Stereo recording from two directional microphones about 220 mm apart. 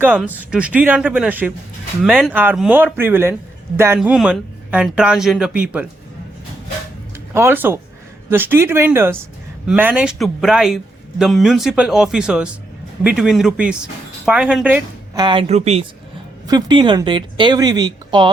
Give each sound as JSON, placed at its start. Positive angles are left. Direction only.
{"t": 0.0, "sound": "speech", "side_deg": -5}
{"t": 7.3, "sound": "speech", "side_deg": -10}
{"t": 15.1, "sound": "speech", "side_deg": -20}
{"t": 16.5, "sound": "speech", "side_deg": -20}